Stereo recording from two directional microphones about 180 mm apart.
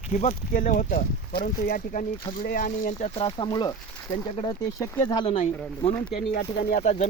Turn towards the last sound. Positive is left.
turn(degrees=45)  # may be behind; listen again after turning